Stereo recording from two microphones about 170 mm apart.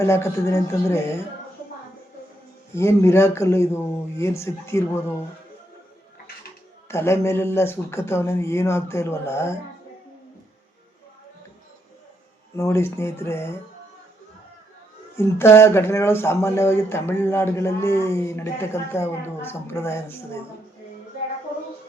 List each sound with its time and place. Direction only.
0.0 s speech: 15° left (ahead or behind)
2.7 s speech: 15° left (ahead or behind)
6.8 s speech: 15° left (ahead or behind)
12.5 s speech: 15° left (ahead or behind)
15.1 s speech: 15° left (ahead or behind)